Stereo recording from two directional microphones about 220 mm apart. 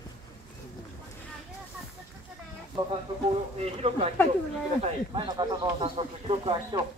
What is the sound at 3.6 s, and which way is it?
Speech, 25° right (ahead or behind).